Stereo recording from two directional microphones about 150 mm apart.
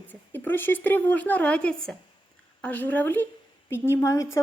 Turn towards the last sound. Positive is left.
turn(degrees=20)  # may be behind; listen again after turning